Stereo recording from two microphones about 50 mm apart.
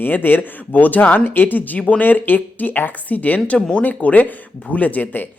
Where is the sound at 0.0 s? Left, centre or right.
Left.